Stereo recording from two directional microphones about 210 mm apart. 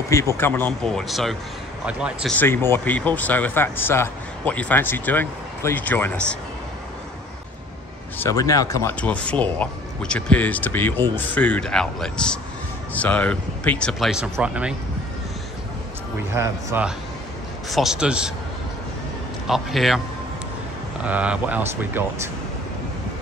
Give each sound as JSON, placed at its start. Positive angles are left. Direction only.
{"t": 0.4, "sound": "speech", "side_deg": 10}
{"t": 2.3, "sound": "speech", "side_deg": 10}
{"t": 8.2, "sound": "speech", "side_deg": 15}
{"t": 16.3, "sound": "speech", "side_deg": -10}
{"t": 19.4, "sound": "speech", "side_deg": 0}
{"t": 21.0, "sound": "speech", "side_deg": -5}